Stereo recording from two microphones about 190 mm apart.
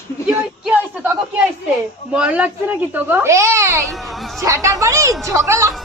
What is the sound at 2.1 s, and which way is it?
A woman's voice, 5° right (ahead or behind).